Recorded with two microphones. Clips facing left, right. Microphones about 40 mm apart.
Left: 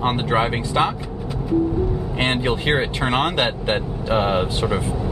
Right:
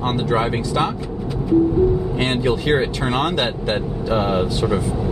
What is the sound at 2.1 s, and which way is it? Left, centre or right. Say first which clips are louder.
Speech: right 1 dB; left.